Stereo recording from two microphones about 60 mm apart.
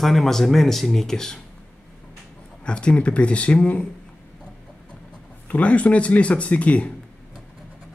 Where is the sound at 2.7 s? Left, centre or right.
Centre.